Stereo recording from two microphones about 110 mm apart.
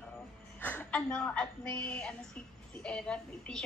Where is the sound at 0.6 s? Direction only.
15° left (ahead or behind).